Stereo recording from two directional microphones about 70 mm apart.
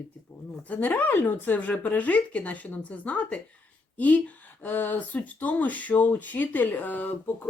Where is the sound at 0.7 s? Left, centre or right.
Left.